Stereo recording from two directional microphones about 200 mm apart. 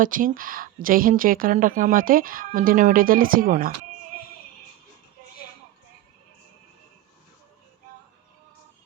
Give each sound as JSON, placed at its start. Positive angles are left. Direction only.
{"t": 0.0, "sound": "a woman's voice", "side_deg": -45}